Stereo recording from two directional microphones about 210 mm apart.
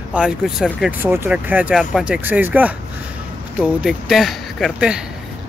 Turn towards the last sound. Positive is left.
turn(degrees=0)  # may be behind; listen again after turning